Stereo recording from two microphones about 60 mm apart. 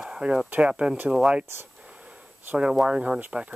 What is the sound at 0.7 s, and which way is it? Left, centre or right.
Speech, centre.